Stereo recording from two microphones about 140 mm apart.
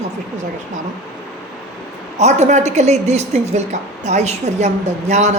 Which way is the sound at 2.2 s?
55° right (ahead or behind).